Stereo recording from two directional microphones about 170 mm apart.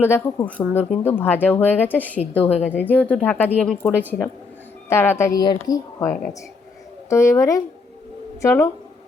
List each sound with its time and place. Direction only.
0.0 s speech: 15° left (ahead or behind)